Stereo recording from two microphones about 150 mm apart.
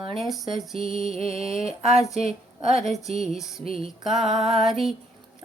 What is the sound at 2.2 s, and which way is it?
Speech, 45° right (ahead or behind).